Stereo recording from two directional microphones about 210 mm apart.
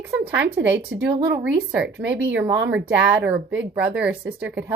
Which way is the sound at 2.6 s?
55° right (ahead or behind).